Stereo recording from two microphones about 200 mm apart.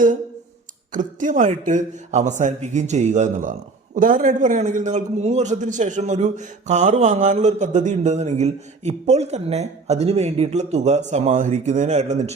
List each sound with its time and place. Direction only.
0.9 s a man's voice: 40° right (ahead or behind)